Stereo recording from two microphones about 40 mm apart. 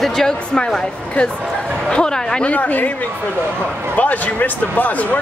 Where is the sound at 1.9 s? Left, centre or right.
Centre.